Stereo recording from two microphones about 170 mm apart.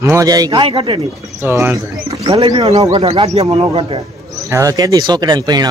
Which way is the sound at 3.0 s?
40° right (ahead or behind).